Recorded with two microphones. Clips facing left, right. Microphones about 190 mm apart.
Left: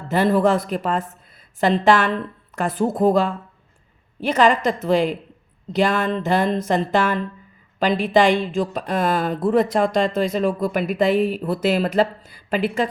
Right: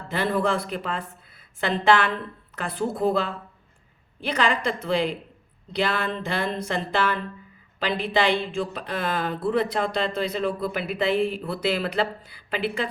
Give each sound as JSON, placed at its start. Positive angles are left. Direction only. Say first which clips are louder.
{"t": 0.1, "sound": "speech", "louder": "left 7 dB", "side_deg": 45}